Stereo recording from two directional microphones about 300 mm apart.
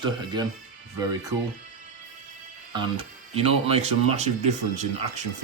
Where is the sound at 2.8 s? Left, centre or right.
Centre.